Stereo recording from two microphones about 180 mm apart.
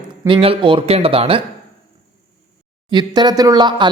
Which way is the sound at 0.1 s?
30° right (ahead or behind).